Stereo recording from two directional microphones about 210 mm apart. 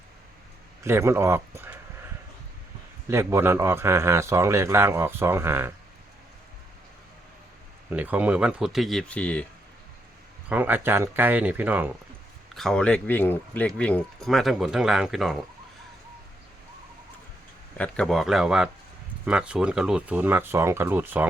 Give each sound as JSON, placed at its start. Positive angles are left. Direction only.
{"t": 0.9, "sound": "a man's voice", "side_deg": -10}
{"t": 3.1, "sound": "a man's voice", "side_deg": -10}
{"t": 7.9, "sound": "speech", "side_deg": -10}
{"t": 10.5, "sound": "a man's voice", "side_deg": -10}
{"t": 12.5, "sound": "speech", "side_deg": 5}
{"t": 17.7, "sound": "a man's voice", "side_deg": 5}